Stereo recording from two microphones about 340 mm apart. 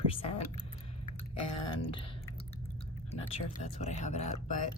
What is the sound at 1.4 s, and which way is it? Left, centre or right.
Speech, left.